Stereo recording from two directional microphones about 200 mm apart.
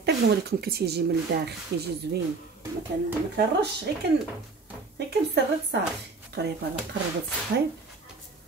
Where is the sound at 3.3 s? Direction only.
55° right (ahead or behind).